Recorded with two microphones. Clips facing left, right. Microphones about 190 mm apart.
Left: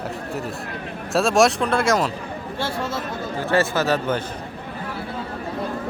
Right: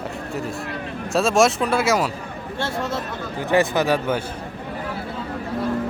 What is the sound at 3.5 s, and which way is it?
Speech, 15° right (ahead or behind).